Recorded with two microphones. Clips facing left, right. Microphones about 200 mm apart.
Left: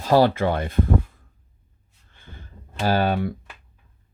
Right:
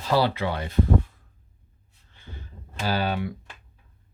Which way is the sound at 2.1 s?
50° left (ahead or behind).